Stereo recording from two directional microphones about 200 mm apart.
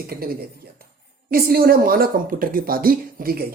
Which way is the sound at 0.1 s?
50° right (ahead or behind).